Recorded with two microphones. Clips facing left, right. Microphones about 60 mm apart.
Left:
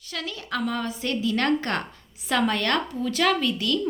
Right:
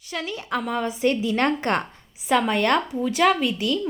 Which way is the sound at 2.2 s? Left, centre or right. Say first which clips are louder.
Right 3 dB; centre.